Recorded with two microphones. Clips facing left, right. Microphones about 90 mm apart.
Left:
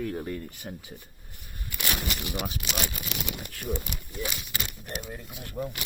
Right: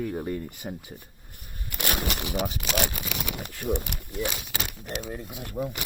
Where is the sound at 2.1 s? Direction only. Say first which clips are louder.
Right 4 dB; 55° right (ahead or behind).